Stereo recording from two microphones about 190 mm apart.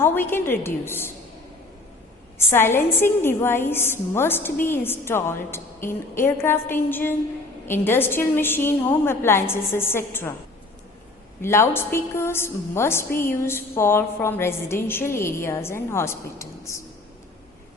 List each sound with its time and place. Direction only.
0.0 s a woman's voice: 10° left (ahead or behind)
2.5 s a woman's voice: 10° left (ahead or behind)
11.4 s a woman's voice: 15° left (ahead or behind)